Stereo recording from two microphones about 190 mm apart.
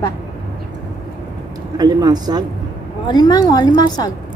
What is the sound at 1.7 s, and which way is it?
Speech, 20° right (ahead or behind).